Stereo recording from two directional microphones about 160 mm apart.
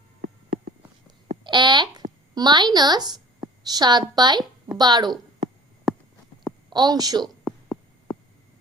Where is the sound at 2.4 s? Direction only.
25° right (ahead or behind).